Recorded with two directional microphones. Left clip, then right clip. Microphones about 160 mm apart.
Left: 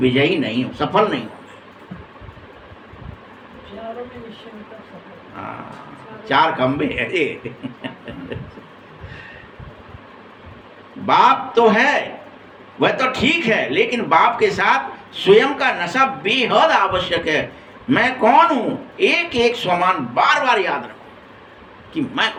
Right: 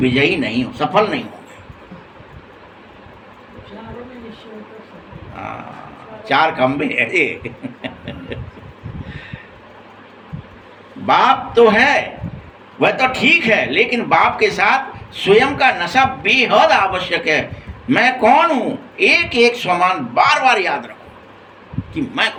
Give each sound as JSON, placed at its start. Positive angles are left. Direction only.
{"t": 0.0, "sound": "a man's voice", "side_deg": -15}
{"t": 6.2, "sound": "a man's voice", "side_deg": -15}
{"t": 11.0, "sound": "a man's voice", "side_deg": -15}
{"t": 21.9, "sound": "a man's voice", "side_deg": -10}